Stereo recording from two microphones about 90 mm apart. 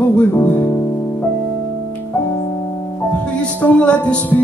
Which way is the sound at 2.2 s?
15° left (ahead or behind).